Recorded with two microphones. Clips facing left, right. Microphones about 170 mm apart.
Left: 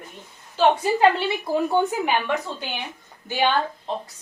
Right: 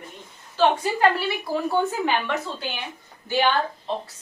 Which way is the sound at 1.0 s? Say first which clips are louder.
Left 2 dB; 20° left (ahead or behind).